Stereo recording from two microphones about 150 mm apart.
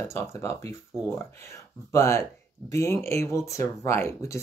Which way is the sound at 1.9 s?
20° left (ahead or behind).